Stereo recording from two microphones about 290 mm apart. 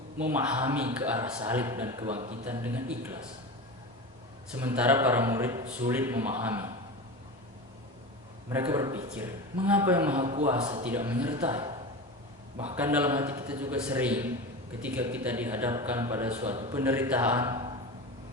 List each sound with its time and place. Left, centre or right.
0.2 s a man's voice: centre
2.0 s a man's voice: right
2.4 s a man's voice: centre
4.6 s a man's voice: centre
8.4 s a man's voice: centre
10.2 s a man's voice: right
12.7 s a man's voice: centre
16.3 s a man's voice: right
16.7 s a man's voice: centre